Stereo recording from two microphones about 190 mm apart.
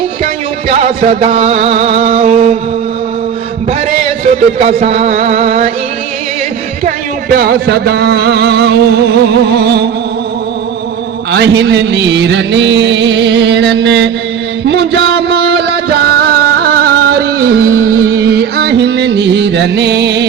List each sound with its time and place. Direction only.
1.0 s music: 45° right (ahead or behind)
1.3 s music: 30° right (ahead or behind)
4.0 s speech: 30° right (ahead or behind)
4.8 s music: 35° right (ahead or behind)
6.8 s music: 50° right (ahead or behind)
11.3 s music: 65° right (ahead or behind)